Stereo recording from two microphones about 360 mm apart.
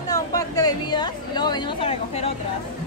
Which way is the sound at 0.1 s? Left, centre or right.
Centre.